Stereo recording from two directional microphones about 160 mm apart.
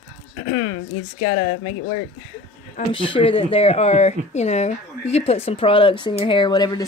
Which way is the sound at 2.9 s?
30° left (ahead or behind).